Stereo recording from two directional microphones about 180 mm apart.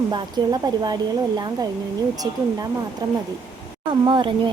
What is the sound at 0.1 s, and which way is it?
Speech, 20° right (ahead or behind).